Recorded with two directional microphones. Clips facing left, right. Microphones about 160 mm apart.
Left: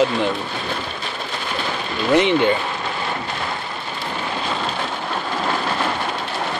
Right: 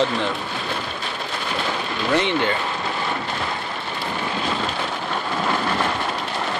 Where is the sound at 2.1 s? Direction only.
20° left (ahead or behind).